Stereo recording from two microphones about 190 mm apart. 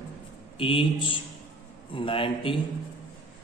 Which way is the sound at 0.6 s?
25° left (ahead or behind).